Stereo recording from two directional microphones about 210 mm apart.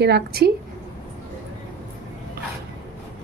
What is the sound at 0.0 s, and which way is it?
Speech, 50° right (ahead or behind).